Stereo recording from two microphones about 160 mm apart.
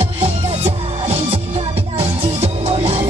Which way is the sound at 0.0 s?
40° right (ahead or behind).